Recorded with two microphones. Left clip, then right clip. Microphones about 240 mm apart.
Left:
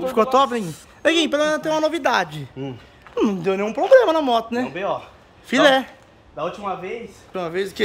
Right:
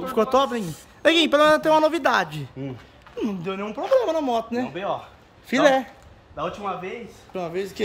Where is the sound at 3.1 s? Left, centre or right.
Centre.